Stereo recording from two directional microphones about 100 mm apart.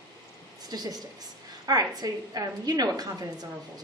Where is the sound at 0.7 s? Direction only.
40° right (ahead or behind).